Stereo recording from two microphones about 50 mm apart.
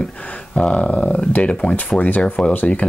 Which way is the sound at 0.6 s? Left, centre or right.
Centre.